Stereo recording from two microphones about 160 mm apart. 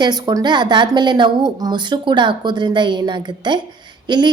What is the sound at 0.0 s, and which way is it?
A woman's voice, 25° right (ahead or behind).